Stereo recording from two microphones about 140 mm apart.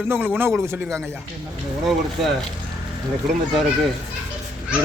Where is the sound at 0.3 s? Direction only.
15° right (ahead or behind).